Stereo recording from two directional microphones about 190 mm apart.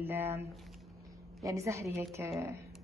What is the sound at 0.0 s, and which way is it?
Speech, 10° right (ahead or behind).